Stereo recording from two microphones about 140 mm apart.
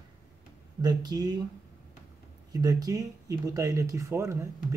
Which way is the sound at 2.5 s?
25° right (ahead or behind).